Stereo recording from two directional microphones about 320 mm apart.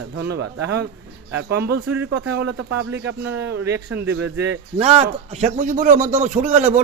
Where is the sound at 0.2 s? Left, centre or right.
Right.